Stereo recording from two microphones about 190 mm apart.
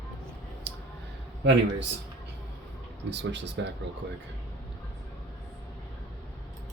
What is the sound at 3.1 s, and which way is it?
Speech, 65° right (ahead or behind).